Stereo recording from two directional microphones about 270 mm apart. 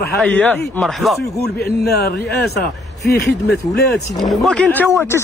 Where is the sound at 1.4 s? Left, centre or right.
Left.